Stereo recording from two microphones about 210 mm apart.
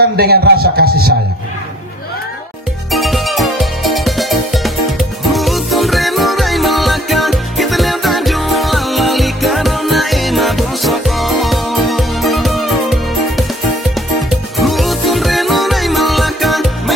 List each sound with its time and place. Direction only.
0.1 s a man's voice: 50° right (ahead or behind)
2.9 s music: centre (ahead or behind)